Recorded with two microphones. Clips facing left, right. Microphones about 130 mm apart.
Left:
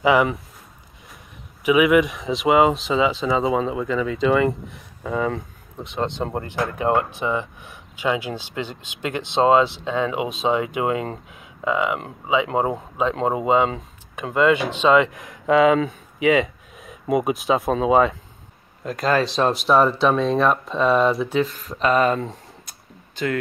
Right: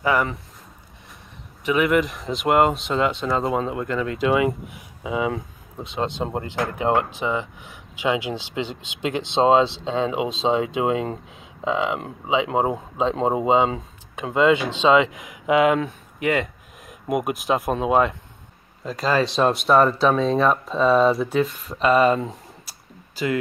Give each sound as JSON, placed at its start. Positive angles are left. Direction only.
{"t": 0.0, "sound": "speech", "side_deg": 15}
{"t": 1.6, "sound": "speech", "side_deg": 5}
{"t": 6.2, "sound": "speech", "side_deg": -20}
{"t": 15.5, "sound": "speech", "side_deg": -5}